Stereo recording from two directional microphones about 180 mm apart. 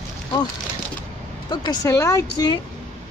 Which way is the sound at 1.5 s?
25° left (ahead or behind).